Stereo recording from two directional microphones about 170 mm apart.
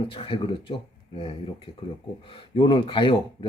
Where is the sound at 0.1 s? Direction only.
30° left (ahead or behind).